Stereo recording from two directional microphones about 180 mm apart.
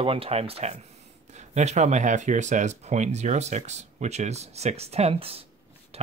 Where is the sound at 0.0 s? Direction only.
30° right (ahead or behind).